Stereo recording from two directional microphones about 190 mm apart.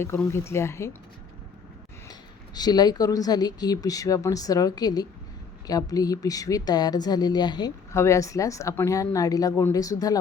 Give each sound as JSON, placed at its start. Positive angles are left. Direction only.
{"t": 0.0, "sound": "speech", "side_deg": 15}
{"t": 2.6, "sound": "a woman's voice", "side_deg": 20}